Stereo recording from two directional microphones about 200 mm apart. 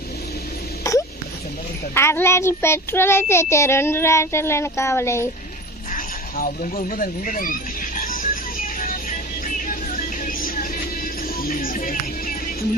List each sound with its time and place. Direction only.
0.9 s a sound: 15° left (ahead or behind)
2.0 s child singing: 10° left (ahead or behind)
5.9 s speech: 45° left (ahead or behind)
7.9 s music: 45° left (ahead or behind)